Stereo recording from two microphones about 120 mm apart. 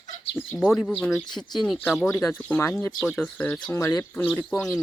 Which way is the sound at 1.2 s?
35° left (ahead or behind).